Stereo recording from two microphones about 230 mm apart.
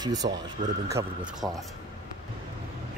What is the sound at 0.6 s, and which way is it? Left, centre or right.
Speech, right.